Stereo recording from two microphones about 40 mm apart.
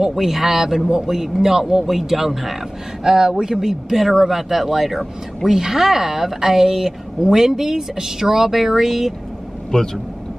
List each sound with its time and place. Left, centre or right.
0.0 s speech: centre
9.7 s speech: left